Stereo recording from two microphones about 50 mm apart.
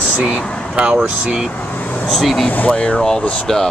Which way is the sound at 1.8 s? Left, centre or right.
Left.